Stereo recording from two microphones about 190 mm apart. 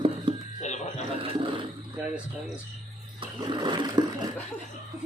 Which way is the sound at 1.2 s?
25° right (ahead or behind).